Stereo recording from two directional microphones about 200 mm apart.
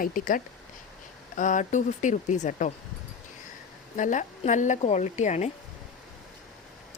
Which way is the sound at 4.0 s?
40° left (ahead or behind).